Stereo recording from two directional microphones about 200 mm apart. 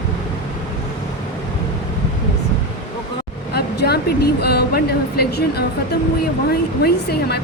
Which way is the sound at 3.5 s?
55° left (ahead or behind).